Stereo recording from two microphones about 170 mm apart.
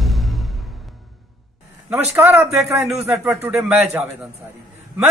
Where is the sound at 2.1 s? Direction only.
10° right (ahead or behind).